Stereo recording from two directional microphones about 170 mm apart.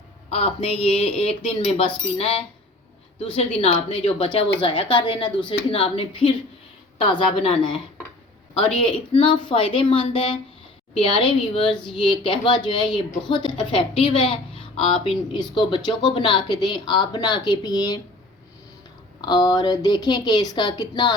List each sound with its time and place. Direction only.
0.3 s a woman's voice: 35° left (ahead or behind)
9.1 s a woman's voice: 30° left (ahead or behind)
19.2 s speech: 25° left (ahead or behind)